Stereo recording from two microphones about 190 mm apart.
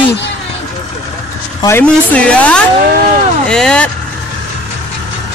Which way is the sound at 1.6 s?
10° left (ahead or behind).